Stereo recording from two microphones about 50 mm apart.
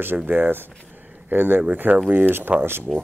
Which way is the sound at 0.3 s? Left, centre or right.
Right.